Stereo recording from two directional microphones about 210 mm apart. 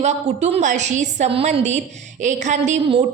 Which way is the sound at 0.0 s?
30° right (ahead or behind).